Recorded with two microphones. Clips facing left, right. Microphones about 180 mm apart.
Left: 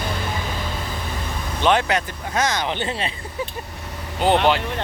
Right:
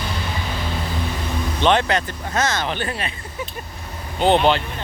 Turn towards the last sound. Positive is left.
turn(degrees=10)  # may be behind; listen again after turning